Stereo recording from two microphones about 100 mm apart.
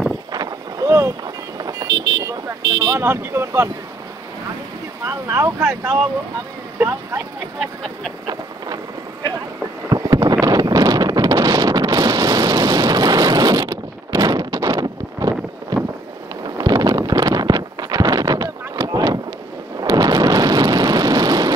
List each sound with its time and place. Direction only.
0.3 s boat: 40° right (ahead or behind)
0.8 s vehicle: 30° right (ahead or behind)
1.2 s vehicle: 40° right (ahead or behind)
3.0 s speech: 25° right (ahead or behind)
5.0 s speech: 30° right (ahead or behind)
9.8 s a sound: 40° right (ahead or behind)
10.4 s wind noise: 40° right (ahead or behind)
19.8 s a sound: 40° right (ahead or behind)